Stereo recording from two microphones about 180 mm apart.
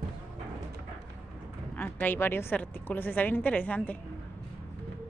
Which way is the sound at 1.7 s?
10° left (ahead or behind).